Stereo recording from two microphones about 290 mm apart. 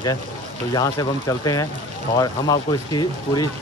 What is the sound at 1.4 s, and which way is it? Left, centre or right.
Speech, centre.